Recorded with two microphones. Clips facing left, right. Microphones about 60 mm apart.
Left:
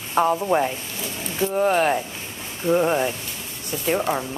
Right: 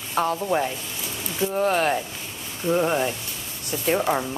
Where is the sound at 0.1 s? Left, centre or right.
Centre.